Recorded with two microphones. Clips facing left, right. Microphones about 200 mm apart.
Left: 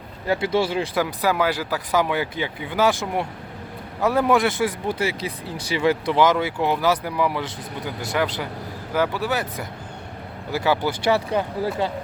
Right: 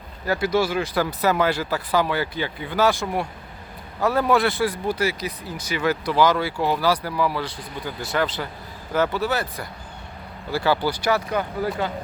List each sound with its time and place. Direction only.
0.3 s speech: 25° left (ahead or behind)
1.2 s speech: 10° left (ahead or behind)
4.0 s speech: 15° left (ahead or behind)
11.0 s speech: 30° left (ahead or behind)